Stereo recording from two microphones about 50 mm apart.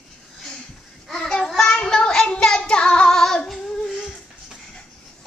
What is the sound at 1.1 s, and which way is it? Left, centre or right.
Child singing, centre.